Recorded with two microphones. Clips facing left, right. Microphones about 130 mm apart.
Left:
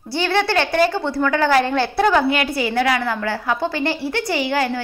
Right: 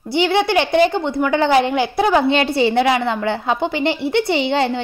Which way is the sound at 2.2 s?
25° right (ahead or behind).